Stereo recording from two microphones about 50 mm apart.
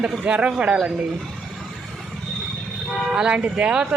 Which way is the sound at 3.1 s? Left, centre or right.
Centre.